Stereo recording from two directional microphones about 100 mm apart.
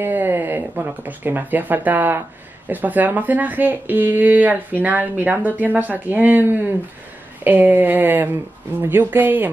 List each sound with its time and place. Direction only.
0.0 s speech: 20° right (ahead or behind)